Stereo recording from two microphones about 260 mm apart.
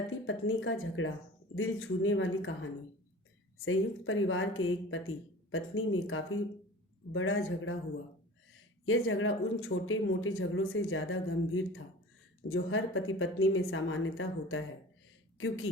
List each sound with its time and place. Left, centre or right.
0.3 s speech: left
8.9 s speech: left